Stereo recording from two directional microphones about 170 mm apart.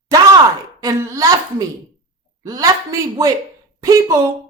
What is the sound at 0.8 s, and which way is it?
Speech, 20° right (ahead or behind).